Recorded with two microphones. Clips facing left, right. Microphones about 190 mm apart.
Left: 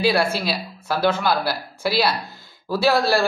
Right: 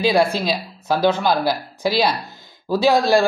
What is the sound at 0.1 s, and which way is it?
Speech, 15° right (ahead or behind).